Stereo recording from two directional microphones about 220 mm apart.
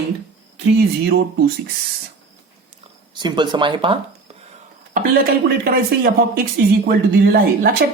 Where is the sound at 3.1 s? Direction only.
20° right (ahead or behind).